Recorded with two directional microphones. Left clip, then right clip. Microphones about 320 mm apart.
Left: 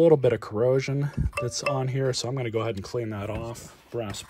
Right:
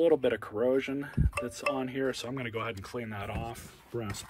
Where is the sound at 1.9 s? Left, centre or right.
Centre.